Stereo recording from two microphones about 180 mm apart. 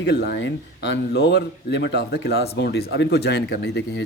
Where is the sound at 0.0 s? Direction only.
70° left (ahead or behind).